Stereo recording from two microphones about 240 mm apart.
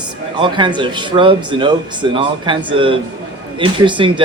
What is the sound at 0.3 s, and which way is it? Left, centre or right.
Speech, centre.